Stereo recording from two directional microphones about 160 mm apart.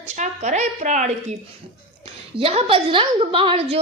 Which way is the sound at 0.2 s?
45° right (ahead or behind).